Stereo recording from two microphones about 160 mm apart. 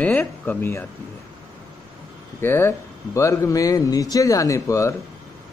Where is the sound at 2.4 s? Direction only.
15° left (ahead or behind).